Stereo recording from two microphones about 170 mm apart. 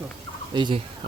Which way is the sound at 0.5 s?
25° right (ahead or behind).